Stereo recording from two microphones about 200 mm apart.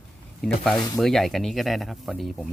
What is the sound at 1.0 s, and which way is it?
Speech, centre (ahead or behind).